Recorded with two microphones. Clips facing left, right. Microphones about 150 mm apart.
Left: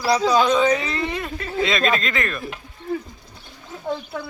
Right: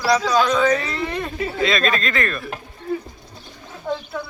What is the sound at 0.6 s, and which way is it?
Speech, 15° left (ahead or behind).